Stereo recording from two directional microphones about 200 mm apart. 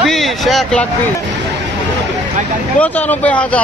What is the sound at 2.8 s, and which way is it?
Speech, 5° left (ahead or behind).